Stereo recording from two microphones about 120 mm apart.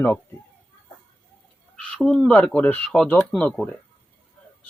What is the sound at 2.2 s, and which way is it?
Speech, 10° left (ahead or behind).